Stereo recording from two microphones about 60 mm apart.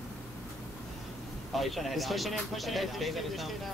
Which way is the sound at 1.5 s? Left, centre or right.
Centre.